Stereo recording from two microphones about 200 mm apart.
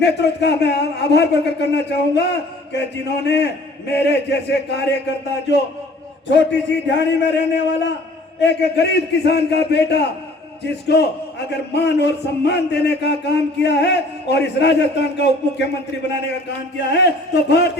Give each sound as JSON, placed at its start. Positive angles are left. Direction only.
{"t": 0.0, "sound": "a man's voice", "side_deg": 55}
{"t": 6.3, "sound": "a man's voice", "side_deg": 60}
{"t": 16.9, "sound": "a man's voice", "side_deg": 60}